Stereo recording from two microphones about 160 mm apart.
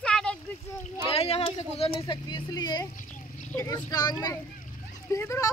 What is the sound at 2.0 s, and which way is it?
Speech, 25° left (ahead or behind).